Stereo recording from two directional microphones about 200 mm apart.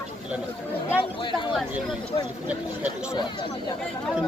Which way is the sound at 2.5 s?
5° right (ahead or behind).